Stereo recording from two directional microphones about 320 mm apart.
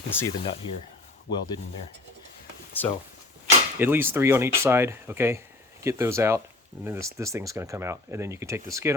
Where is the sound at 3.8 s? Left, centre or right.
Centre.